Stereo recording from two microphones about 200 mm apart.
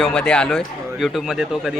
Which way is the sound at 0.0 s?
5° left (ahead or behind).